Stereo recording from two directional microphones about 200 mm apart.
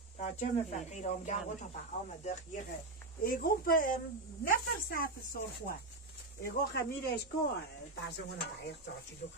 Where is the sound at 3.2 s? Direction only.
45° left (ahead or behind).